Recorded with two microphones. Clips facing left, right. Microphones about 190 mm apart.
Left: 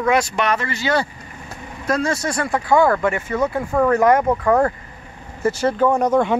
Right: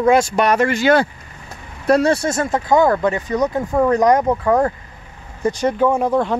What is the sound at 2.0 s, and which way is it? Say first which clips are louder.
Speech: right 5 dB; 30° right (ahead or behind).